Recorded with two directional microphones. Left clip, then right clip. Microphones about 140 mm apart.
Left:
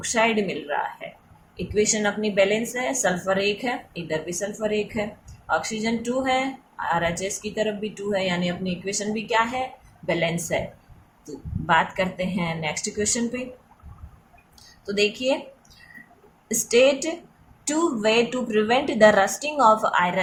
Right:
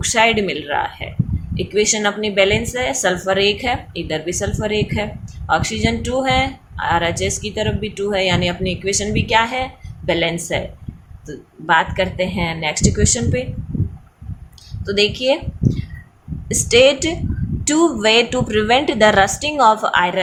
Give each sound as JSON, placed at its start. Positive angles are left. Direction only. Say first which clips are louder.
{"t": 0.0, "sound": "speech", "louder": "right 7 dB", "side_deg": -35}
{"t": 10.1, "sound": "a woman's voice", "louder": "right 6 dB", "side_deg": -20}
{"t": 11.6, "sound": "a woman's voice", "louder": "right 5 dB", "side_deg": -20}
{"t": 14.8, "sound": "a woman's voice", "louder": "right 6 dB", "side_deg": -25}
{"t": 16.6, "sound": "a woman's voice", "louder": "right 6 dB", "side_deg": -25}